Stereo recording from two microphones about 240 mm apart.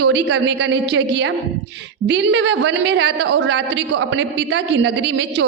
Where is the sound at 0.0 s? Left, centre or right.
Right.